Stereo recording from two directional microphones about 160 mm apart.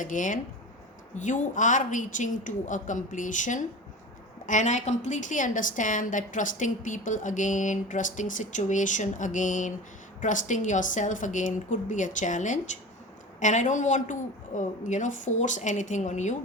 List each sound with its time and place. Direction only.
0.0 s a woman's voice: 55° left (ahead or behind)